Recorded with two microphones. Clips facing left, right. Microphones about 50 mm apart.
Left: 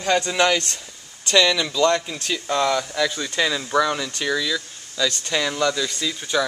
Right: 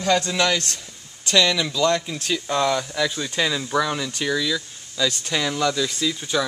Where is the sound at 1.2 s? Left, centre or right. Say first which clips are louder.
Left 1 dB; centre.